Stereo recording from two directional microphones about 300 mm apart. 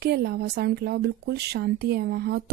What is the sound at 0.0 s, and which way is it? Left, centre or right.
Speech, right.